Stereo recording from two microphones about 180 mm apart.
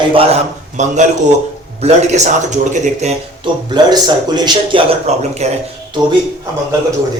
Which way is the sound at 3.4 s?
25° right (ahead or behind).